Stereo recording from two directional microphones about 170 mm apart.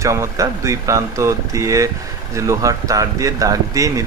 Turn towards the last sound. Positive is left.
turn(degrees=-20)  # may be behind; listen again after turning